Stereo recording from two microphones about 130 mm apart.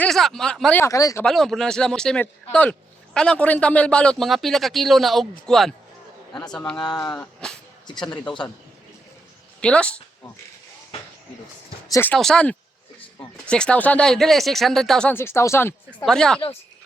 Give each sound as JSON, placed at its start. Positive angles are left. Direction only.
{"t": 0.0, "sound": "speech", "side_deg": 5}
{"t": 0.8, "sound": "speech", "side_deg": 25}
{"t": 1.2, "sound": "speech", "side_deg": 0}
{"t": 6.7, "sound": "speech", "side_deg": 30}
{"t": 7.1, "sound": "speech", "side_deg": 5}
{"t": 9.6, "sound": "a woman's voice", "side_deg": 10}
{"t": 11.9, "sound": "speech", "side_deg": 20}
{"t": 12.1, "sound": "speech", "side_deg": 5}
{"t": 15.1, "sound": "speech", "side_deg": 20}
{"t": 16.0, "sound": "speech", "side_deg": 5}